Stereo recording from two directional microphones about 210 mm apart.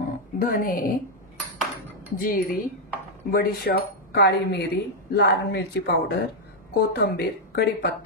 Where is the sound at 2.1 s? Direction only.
45° left (ahead or behind).